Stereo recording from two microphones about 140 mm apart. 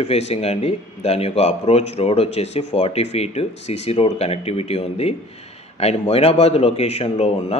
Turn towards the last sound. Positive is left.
turn(degrees=45)  # may be behind; listen again after turning